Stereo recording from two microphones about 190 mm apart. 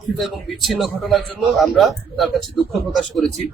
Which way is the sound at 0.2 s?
Centre (ahead or behind).